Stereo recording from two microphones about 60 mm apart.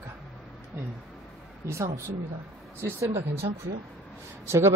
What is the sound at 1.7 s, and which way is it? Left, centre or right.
Speech, right.